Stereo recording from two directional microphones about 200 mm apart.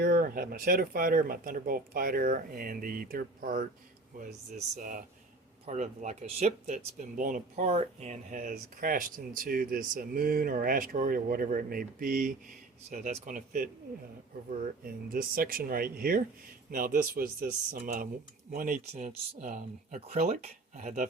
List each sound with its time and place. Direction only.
0.0 s speech: 45° right (ahead or behind)
14.8 s speech: 45° right (ahead or behind)